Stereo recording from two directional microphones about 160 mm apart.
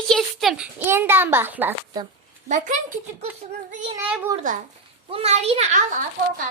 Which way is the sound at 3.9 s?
10° right (ahead or behind).